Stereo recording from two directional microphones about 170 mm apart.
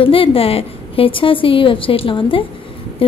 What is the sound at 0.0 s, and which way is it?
Speech, 30° left (ahead or behind).